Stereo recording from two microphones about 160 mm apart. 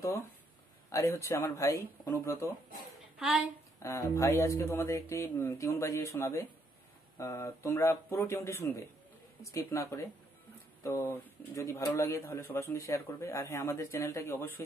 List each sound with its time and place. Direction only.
0.9 s speech: 20° left (ahead or behind)
3.8 s speech: 20° left (ahead or behind)